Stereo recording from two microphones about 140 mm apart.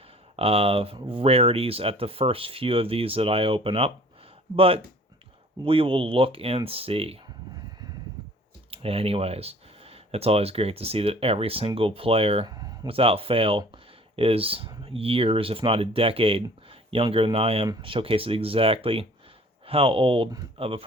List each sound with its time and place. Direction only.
0.3 s speech: 45° right (ahead or behind)
8.7 s speech: 45° right (ahead or behind)
12.5 s a sound: 30° right (ahead or behind)
12.9 s speech: 45° right (ahead or behind)